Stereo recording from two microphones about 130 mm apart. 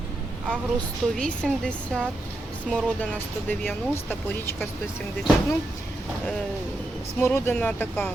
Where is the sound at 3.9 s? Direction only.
15° left (ahead or behind).